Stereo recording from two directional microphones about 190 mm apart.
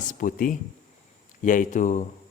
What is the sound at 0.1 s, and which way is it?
A man's voice, 45° left (ahead or behind).